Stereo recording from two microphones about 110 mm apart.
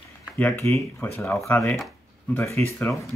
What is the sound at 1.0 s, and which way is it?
Speech, 15° left (ahead or behind).